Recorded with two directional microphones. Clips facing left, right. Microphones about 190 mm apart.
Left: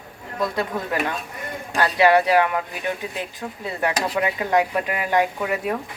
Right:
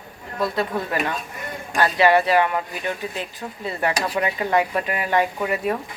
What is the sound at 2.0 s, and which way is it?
Speech, 10° left (ahead or behind).